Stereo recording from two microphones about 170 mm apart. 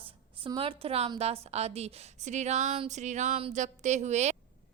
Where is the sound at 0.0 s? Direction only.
30° right (ahead or behind).